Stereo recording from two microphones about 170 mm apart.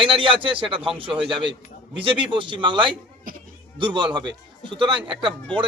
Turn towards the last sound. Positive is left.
turn(degrees=-30)  # may be behind; listen again after turning